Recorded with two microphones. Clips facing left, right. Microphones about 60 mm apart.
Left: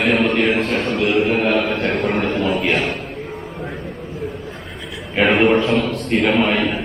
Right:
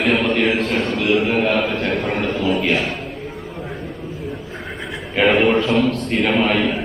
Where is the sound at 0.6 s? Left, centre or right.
Centre.